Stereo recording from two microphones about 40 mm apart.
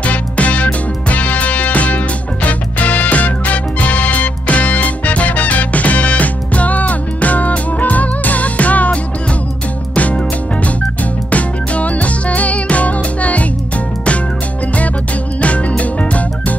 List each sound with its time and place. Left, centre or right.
0.0 s music: left
11.2 s music: left
15.4 s music: left